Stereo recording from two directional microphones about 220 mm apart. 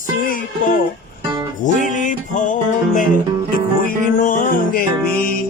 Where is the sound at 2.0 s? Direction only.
35° left (ahead or behind).